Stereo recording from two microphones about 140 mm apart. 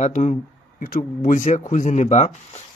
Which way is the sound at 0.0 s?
55° left (ahead or behind).